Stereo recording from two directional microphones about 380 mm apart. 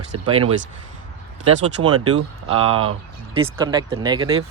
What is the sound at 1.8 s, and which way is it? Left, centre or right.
Speech, right.